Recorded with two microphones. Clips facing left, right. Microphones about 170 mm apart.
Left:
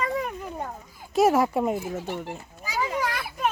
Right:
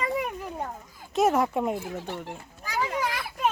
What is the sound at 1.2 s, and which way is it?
A child's voice, 5° left (ahead or behind).